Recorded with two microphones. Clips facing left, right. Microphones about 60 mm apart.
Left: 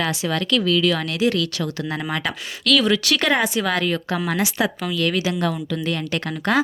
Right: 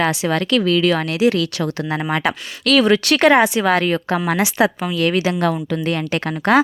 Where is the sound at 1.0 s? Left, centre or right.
Centre.